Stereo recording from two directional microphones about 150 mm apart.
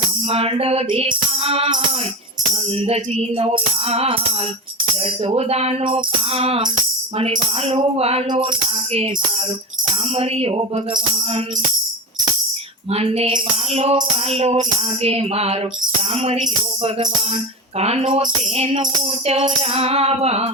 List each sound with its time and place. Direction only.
0.3 s music: 40° right (ahead or behind)
2.8 s music: 40° right (ahead or behind)
5.2 s music: 40° right (ahead or behind)
10.2 s music: 40° right (ahead or behind)
12.9 s speech: 40° right (ahead or behind)
15.0 s music: 40° right (ahead or behind)
17.7 s speech: 45° right (ahead or behind)
18.2 s music: 45° right (ahead or behind)